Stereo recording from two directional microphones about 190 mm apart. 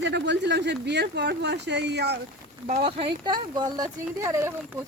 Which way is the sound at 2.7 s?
30° right (ahead or behind).